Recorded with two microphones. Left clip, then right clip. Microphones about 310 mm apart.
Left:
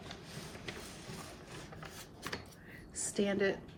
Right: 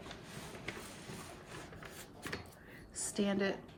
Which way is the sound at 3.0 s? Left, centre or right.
Centre.